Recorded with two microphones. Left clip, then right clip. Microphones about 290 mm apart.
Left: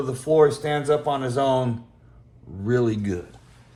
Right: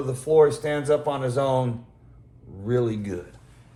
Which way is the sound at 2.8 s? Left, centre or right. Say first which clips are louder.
Left 2 dB; left.